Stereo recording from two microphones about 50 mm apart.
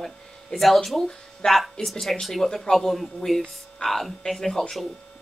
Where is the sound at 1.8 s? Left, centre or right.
Centre.